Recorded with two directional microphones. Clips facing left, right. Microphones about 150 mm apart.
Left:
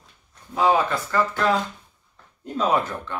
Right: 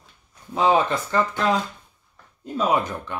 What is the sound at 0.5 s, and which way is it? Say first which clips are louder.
Speech: right 1 dB; 20° right (ahead or behind).